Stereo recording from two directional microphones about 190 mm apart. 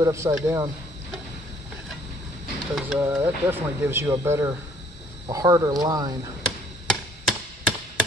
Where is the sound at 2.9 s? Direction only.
10° right (ahead or behind).